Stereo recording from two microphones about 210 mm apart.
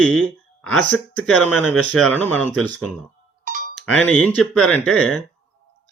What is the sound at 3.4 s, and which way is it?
Music, 40° right (ahead or behind).